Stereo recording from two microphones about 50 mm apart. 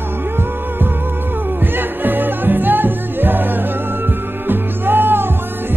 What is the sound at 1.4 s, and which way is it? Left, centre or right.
Music, right.